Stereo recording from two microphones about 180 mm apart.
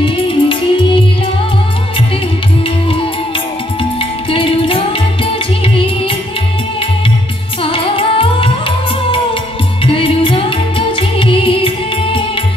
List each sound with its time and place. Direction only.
0.0 s music: 30° left (ahead or behind)
4.0 s music: 30° left (ahead or behind)
7.6 s music: 30° left (ahead or behind)